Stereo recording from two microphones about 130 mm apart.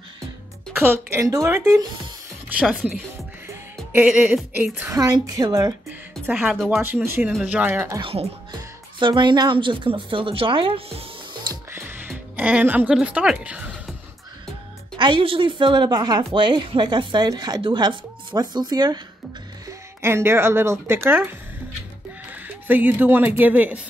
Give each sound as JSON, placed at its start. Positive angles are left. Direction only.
{"t": 0.7, "sound": "a sound", "side_deg": -15}
{"t": 1.2, "sound": "a woman's voice", "side_deg": -25}
{"t": 2.5, "sound": "speech", "side_deg": -5}
{"t": 3.9, "sound": "a sound", "side_deg": -5}
{"t": 4.9, "sound": "a woman's voice", "side_deg": -25}
{"t": 6.2, "sound": "speech", "side_deg": -10}
{"t": 7.2, "sound": "a sound", "side_deg": -10}
{"t": 8.0, "sound": "speech", "side_deg": -45}
{"t": 9.0, "sound": "speech", "side_deg": -35}
{"t": 11.7, "sound": "music", "side_deg": -15}
{"t": 12.4, "sound": "a woman's voice", "side_deg": -10}
{"t": 15.0, "sound": "speech", "side_deg": -40}
{"t": 20.0, "sound": "a woman's voice", "side_deg": -20}
{"t": 22.3, "sound": "speech", "side_deg": -15}